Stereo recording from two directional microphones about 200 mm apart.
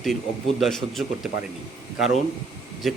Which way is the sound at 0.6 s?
Centre (ahead or behind).